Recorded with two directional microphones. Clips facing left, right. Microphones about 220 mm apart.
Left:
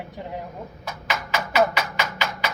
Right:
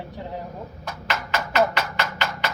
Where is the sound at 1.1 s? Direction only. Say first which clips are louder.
Even; 10° left (ahead or behind).